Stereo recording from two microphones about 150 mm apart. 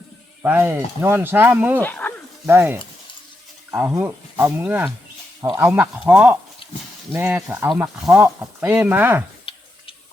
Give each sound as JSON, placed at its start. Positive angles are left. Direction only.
{"t": 0.4, "sound": "speech", "side_deg": -15}
{"t": 1.8, "sound": "speech", "side_deg": 10}
{"t": 2.5, "sound": "speech", "side_deg": -15}
{"t": 9.5, "sound": "a sound", "side_deg": 35}